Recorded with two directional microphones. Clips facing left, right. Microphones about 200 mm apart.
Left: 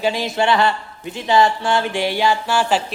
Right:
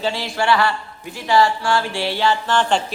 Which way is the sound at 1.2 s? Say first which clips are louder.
Left 1 dB; 20° left (ahead or behind).